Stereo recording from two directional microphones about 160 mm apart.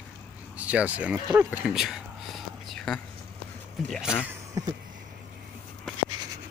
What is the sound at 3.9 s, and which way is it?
Speech, 5° right (ahead or behind).